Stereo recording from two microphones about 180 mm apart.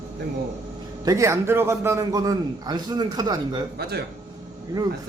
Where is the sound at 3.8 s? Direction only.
65° right (ahead or behind).